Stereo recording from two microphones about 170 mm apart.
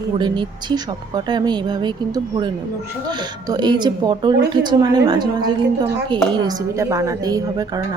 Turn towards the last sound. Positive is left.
turn(degrees=-20)  # may be behind; listen again after turning